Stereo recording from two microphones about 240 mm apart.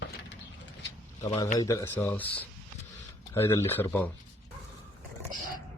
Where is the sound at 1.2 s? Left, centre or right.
Centre.